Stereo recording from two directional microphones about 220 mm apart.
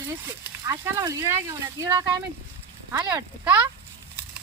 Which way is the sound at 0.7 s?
15° right (ahead or behind).